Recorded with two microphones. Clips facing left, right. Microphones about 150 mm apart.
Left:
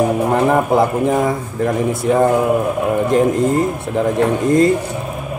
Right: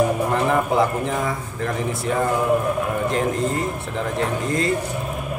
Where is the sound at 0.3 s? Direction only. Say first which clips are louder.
Left 6 dB; 50° left (ahead or behind).